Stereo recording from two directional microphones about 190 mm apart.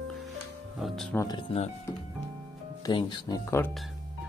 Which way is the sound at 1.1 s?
20° left (ahead or behind).